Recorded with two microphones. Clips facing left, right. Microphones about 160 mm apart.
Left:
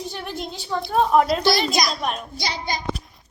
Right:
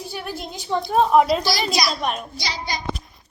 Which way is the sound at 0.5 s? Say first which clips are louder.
Right 6 dB; 15° right (ahead or behind).